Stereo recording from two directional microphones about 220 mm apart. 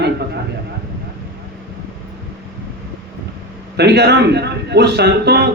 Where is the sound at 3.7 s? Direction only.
50° right (ahead or behind).